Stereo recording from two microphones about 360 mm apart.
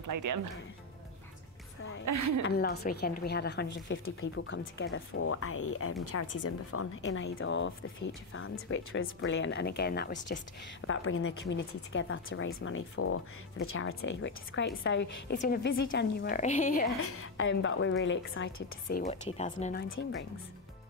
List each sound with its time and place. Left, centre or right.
0.0 s speech: right
2.0 s a woman's voice: right
2.4 s speech: left
10.9 s speech: left
17.0 s speech: left; by 19.8 s centre
19.9 s speech: left